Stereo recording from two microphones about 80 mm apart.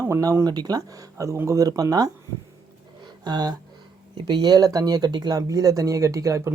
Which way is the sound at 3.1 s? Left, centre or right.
Right.